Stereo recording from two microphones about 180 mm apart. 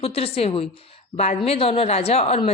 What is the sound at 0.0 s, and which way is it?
A woman's voice, 35° left (ahead or behind).